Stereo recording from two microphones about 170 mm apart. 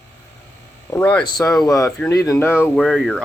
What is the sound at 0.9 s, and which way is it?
Speech, 10° left (ahead or behind).